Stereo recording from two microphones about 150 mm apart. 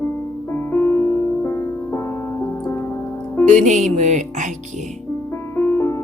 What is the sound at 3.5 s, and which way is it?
Speech, 55° right (ahead or behind).